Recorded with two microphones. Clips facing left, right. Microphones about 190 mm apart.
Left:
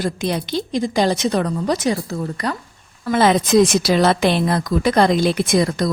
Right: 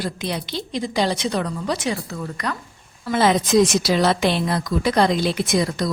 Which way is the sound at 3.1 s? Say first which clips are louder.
Left 3 dB; 55° left (ahead or behind).